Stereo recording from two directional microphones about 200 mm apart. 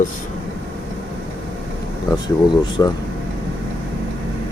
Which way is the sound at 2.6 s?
20° left (ahead or behind).